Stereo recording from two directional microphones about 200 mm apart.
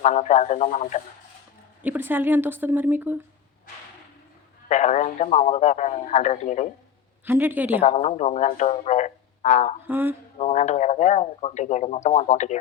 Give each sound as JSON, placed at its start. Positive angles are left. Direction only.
{"t": 0.0, "sound": "speech", "side_deg": 35}
{"t": 1.8, "sound": "speech", "side_deg": -10}
{"t": 4.7, "sound": "speech", "side_deg": 35}
{"t": 7.3, "sound": "speech", "side_deg": -10}
{"t": 7.9, "sound": "speech", "side_deg": 35}
{"t": 9.8, "sound": "speech", "side_deg": -10}
{"t": 10.3, "sound": "speech", "side_deg": 35}